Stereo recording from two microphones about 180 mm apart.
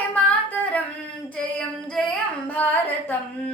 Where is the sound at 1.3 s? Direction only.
5° left (ahead or behind).